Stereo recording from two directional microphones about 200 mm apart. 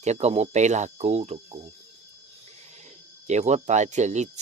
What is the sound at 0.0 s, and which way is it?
Speech, 35° right (ahead or behind).